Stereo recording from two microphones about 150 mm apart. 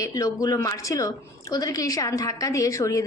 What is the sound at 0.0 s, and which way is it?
A woman's voice, 25° left (ahead or behind).